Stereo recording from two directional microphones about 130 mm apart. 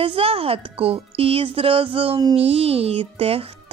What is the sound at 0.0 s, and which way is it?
A child's voice, 45° right (ahead or behind).